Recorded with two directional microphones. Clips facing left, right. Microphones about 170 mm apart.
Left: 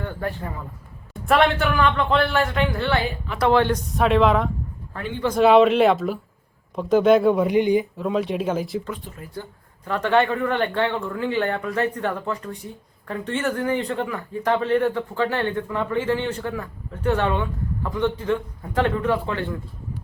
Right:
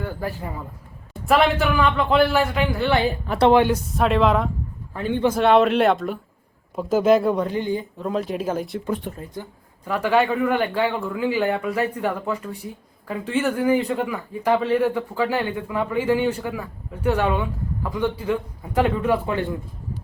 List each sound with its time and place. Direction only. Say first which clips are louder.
0.0 s speech: even; 5° right (ahead or behind)
3.9 s speech: left 2 dB; centre (ahead or behind)
7.4 s speech: left 6 dB; 15° left (ahead or behind)
7.9 s speech: left 2 dB; centre (ahead or behind)
9.3 s speech: even; 10° right (ahead or behind)